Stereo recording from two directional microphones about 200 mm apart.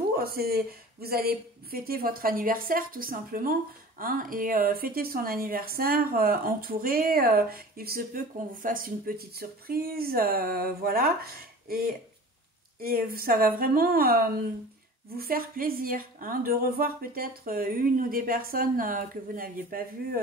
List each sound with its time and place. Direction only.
0.1 s speech: 50° right (ahead or behind)